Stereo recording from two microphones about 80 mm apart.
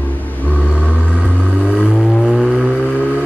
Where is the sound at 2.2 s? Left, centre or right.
Centre.